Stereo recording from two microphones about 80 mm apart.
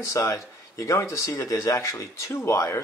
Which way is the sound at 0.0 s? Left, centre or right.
Left.